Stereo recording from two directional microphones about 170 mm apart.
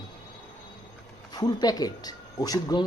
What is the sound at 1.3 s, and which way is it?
Speech, 25° left (ahead or behind).